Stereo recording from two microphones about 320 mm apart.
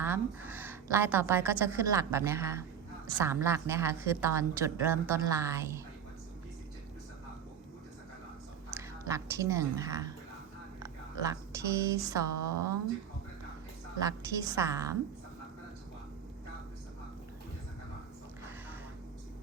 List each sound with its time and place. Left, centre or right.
0.0 s a woman's voice: centre
8.7 s a woman's voice: centre
11.2 s a woman's voice: centre
14.0 s a woman's voice: centre